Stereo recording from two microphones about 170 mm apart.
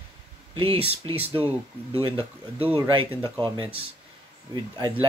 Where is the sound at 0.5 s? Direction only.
35° right (ahead or behind).